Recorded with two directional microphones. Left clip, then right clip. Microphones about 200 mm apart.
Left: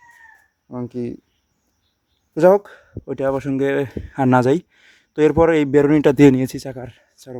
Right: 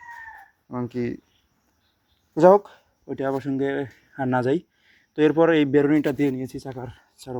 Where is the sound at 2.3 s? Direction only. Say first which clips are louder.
Left 2 dB; 25° left (ahead or behind).